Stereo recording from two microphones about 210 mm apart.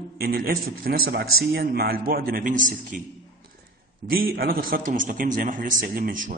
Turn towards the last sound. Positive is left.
turn(degrees=-45)  # may be behind; listen again after turning